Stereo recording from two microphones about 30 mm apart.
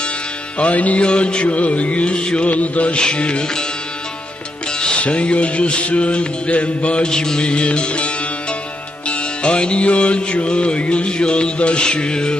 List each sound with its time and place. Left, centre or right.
0.6 s music: left
1.0 s music: left
1.5 s music: left
2.6 s music: left
2.9 s music: left
4.8 s music: left
7.1 s music: left